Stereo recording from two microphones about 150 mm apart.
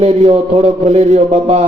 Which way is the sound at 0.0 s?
45° right (ahead or behind).